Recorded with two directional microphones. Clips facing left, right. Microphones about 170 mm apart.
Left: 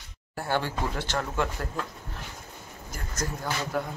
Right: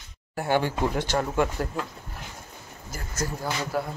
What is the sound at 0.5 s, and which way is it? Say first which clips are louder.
Speech: right 4 dB; 15° right (ahead or behind).